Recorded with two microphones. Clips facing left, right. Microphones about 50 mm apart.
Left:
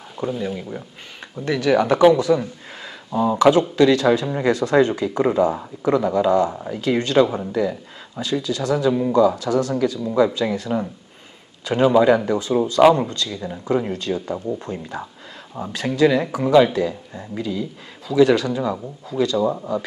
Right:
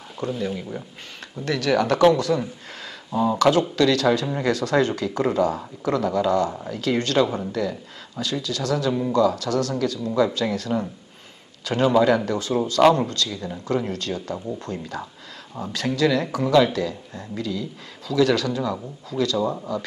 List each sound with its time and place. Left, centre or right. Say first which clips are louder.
0.2 s speech: left 2 dB; centre
2.8 s a sound: left 2 dB; centre
3.3 s speech: left 5 dB; centre